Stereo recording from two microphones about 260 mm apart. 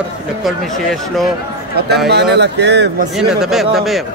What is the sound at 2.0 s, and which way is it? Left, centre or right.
Speech, right.